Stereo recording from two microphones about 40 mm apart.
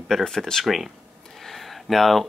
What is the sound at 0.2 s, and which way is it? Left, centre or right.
Speech, centre.